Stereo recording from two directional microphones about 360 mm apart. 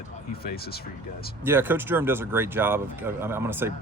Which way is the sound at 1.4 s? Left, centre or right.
Centre.